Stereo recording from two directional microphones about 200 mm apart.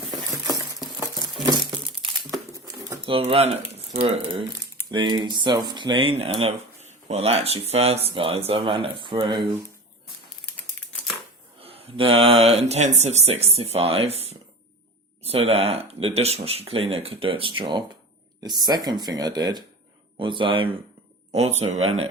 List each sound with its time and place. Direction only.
1.5 s crumpling: 20° right (ahead or behind)
2.9 s speech: 25° right (ahead or behind)
11.6 s speech: 30° right (ahead or behind)